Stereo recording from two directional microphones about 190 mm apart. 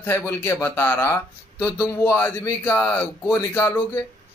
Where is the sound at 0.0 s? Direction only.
10° left (ahead or behind).